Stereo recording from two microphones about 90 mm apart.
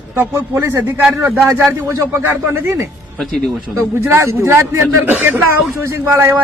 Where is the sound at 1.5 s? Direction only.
30° right (ahead or behind).